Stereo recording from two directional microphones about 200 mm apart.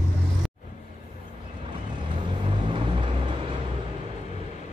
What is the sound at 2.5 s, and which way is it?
Vehicle, 25° right (ahead or behind).